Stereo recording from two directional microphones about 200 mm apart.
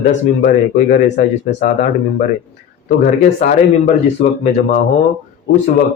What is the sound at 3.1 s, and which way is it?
Speech, 40° left (ahead or behind).